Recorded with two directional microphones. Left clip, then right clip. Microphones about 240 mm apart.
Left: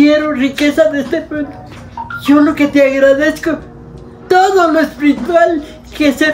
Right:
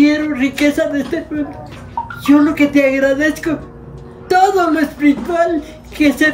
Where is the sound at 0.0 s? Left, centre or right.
Centre.